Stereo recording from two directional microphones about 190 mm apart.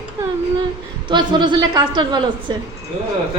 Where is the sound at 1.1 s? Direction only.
25° right (ahead or behind).